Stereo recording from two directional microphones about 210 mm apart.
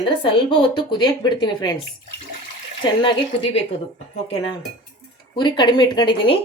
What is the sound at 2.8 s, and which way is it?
Speech, 25° left (ahead or behind).